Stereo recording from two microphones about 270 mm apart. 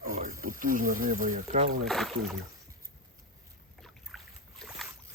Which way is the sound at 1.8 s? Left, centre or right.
Centre.